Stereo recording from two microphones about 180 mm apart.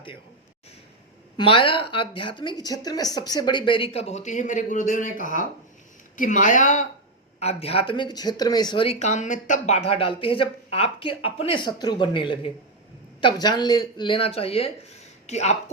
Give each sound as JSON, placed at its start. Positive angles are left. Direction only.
{"t": 1.4, "sound": "a woman's voice", "side_deg": 30}